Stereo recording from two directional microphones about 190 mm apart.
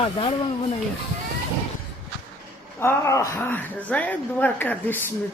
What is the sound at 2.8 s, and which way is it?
Speech, 15° left (ahead or behind).